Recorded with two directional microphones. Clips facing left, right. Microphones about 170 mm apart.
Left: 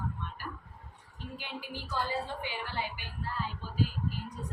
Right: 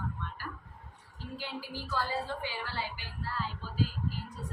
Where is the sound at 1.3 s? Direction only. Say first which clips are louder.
Right 2 dB; 20° left (ahead or behind).